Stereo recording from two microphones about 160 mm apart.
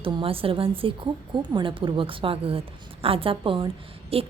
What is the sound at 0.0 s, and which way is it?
A woman's voice, 35° right (ahead or behind).